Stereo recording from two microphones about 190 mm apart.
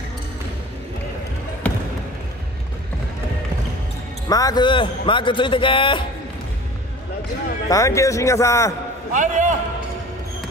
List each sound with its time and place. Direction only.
1.6 s basketball bounce: 5° left (ahead or behind)
4.3 s a man's voice: 20° left (ahead or behind)
7.7 s a man's voice: 15° left (ahead or behind)
9.1 s a man's voice: 40° right (ahead or behind)